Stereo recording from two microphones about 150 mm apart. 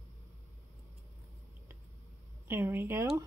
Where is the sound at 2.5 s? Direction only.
15° right (ahead or behind).